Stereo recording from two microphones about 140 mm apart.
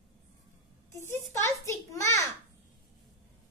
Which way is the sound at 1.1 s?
20° left (ahead or behind).